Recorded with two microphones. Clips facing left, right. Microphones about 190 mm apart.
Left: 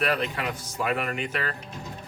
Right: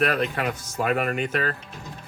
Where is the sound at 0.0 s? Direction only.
50° right (ahead or behind).